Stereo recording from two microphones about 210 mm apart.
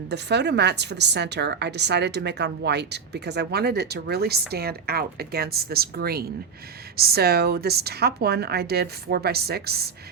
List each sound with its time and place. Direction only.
0.1 s a woman's voice: 55° right (ahead or behind)